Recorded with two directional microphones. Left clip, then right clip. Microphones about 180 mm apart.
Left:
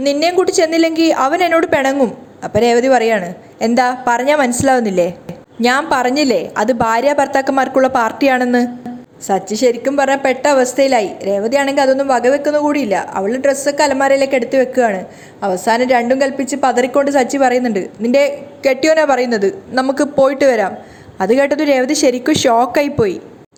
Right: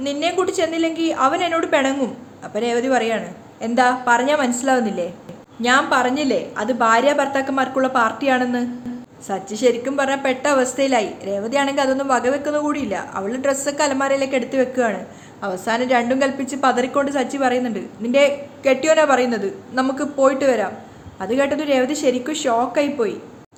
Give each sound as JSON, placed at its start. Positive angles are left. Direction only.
{"t": 0.0, "sound": "a woman's voice", "side_deg": 35}